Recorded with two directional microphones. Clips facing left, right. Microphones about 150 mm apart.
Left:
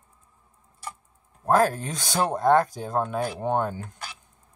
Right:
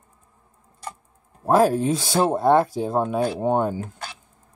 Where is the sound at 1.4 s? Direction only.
10° right (ahead or behind).